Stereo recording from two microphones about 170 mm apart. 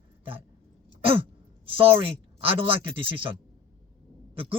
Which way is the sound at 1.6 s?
30° right (ahead or behind).